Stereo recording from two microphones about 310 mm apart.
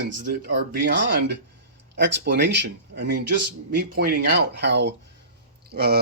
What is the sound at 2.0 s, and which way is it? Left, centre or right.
Speech, right.